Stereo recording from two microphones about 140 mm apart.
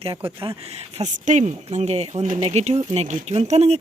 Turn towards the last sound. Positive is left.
turn(degrees=-50)  # may be behind; listen again after turning